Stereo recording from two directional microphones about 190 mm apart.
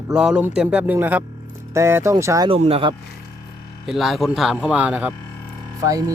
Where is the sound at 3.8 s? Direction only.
Centre (ahead or behind).